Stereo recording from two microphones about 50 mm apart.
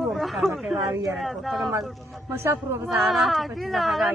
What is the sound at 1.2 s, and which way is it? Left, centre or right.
Speech, centre.